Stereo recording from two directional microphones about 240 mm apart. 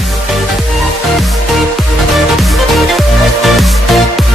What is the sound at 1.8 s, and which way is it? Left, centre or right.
Music, centre.